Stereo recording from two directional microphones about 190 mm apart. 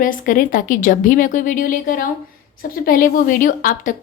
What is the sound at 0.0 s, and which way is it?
A woman's voice, 45° left (ahead or behind).